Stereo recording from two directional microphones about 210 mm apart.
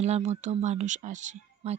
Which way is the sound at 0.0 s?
30° right (ahead or behind).